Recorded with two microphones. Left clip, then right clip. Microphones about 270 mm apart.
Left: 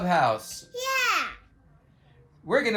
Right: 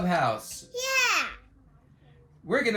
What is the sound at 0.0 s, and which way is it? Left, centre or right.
Speech, centre.